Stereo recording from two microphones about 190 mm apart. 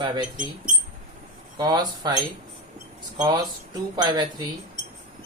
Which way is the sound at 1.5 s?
20° right (ahead or behind).